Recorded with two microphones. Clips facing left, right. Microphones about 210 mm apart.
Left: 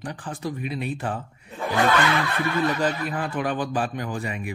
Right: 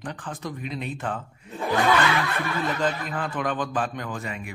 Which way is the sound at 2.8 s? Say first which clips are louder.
Left 2 dB; 10° left (ahead or behind).